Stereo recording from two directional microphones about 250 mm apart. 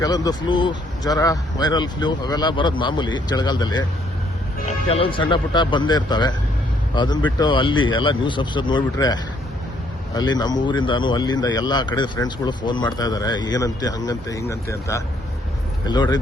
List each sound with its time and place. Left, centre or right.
0.0 s speech: centre
4.9 s speech: left
10.2 s speech: centre